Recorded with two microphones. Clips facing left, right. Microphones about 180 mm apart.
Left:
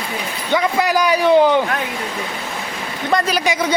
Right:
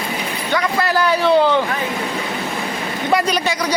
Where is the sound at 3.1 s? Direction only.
5° right (ahead or behind).